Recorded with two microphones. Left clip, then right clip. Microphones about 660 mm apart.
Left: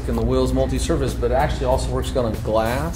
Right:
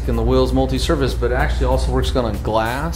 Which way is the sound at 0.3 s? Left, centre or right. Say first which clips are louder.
Right 4 dB; right.